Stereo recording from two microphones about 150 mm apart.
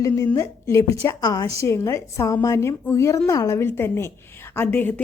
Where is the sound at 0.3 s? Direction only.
20° left (ahead or behind).